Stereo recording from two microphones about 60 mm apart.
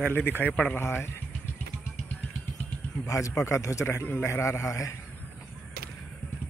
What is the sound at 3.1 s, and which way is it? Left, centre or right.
A man's voice, left.